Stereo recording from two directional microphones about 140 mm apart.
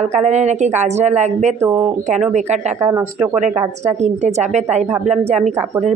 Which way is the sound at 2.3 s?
55° right (ahead or behind).